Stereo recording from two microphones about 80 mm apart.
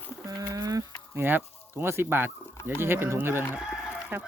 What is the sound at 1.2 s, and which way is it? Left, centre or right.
Speech, right.